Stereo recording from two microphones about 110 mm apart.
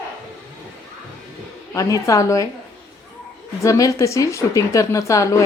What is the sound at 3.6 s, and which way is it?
A woman's voice, 30° left (ahead or behind).